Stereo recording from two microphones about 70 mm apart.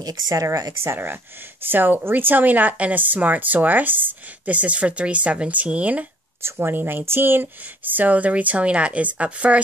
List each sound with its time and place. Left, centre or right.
0.0 s speech: right
0.4 s speech: right
0.8 s speech: right
6.4 s speech: right